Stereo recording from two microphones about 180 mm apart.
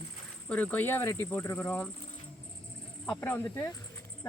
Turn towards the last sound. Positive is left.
turn(degrees=10)  # may be behind; listen again after turning